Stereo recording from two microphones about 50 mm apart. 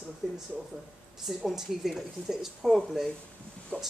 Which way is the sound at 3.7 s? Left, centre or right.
Left.